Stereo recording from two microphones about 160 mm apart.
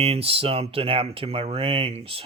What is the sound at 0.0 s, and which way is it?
Speech, 40° right (ahead or behind).